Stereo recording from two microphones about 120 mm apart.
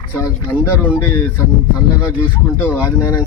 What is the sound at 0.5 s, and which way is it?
Speech, 20° left (ahead or behind).